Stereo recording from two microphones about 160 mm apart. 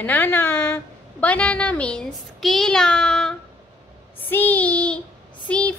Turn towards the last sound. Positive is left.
turn(degrees=10)  # may be behind; listen again after turning